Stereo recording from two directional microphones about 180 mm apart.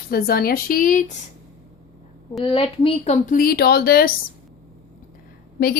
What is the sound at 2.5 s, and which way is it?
Speech, 30° left (ahead or behind).